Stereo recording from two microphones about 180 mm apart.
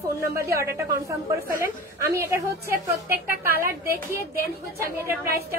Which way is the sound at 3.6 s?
15° right (ahead or behind).